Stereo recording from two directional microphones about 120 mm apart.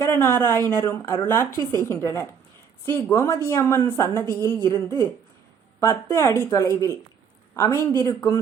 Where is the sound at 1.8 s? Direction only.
25° left (ahead or behind).